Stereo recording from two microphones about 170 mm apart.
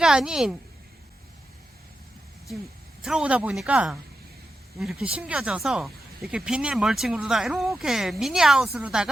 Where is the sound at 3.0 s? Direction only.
5° right (ahead or behind).